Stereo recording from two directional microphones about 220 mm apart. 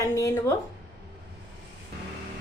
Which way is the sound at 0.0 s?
15° left (ahead or behind).